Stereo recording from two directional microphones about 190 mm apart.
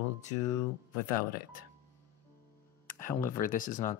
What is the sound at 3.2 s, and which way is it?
Speech, 45° left (ahead or behind).